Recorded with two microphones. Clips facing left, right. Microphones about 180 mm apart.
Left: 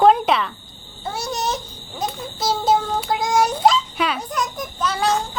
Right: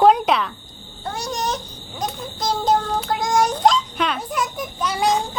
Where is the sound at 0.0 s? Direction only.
Centre (ahead or behind).